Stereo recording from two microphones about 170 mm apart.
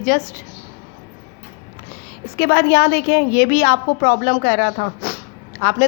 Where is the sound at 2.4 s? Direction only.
70° left (ahead or behind).